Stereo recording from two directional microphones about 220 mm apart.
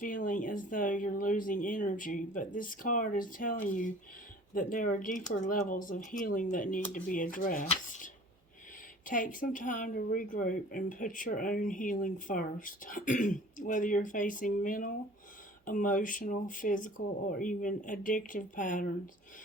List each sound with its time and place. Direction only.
0.0 s speech: 35° left (ahead or behind)